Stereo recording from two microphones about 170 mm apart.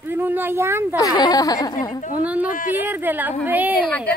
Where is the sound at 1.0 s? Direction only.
20° left (ahead or behind).